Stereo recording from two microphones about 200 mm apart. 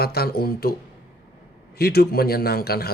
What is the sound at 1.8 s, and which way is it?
Speech, 50° left (ahead or behind).